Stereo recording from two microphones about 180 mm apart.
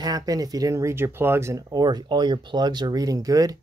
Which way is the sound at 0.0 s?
20° right (ahead or behind).